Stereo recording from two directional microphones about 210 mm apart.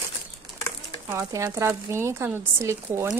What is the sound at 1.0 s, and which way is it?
Speech, 15° right (ahead or behind).